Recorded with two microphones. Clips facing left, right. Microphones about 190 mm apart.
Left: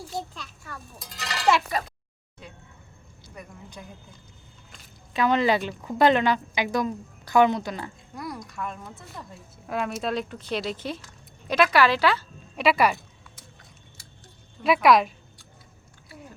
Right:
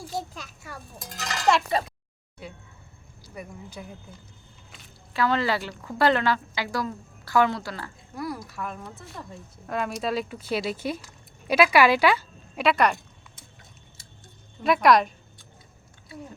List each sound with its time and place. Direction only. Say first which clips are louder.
0.9 s music: right 1 dB; 50° right (ahead or behind)
1.8 s speech: right 2 dB; 30° right (ahead or behind)
3.3 s speech: right 3 dB; 5° right (ahead or behind)
5.1 s a woman's voice: left 3 dB; 20° left (ahead or behind)
8.1 s speech: right 4 dB; 5° right (ahead or behind)
12.5 s speech: left 1 dB; 5° left (ahead or behind)
14.6 s speech: even; centre (ahead or behind)